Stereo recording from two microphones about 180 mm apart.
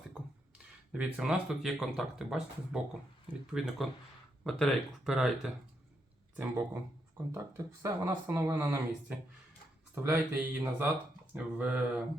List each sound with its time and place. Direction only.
0.9 s speech: 5° right (ahead or behind)